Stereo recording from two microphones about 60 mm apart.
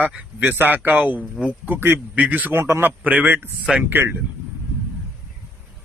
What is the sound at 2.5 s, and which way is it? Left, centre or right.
A man's voice, right.